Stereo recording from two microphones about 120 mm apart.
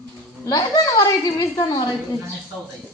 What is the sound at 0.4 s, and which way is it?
A woman's voice, 30° left (ahead or behind).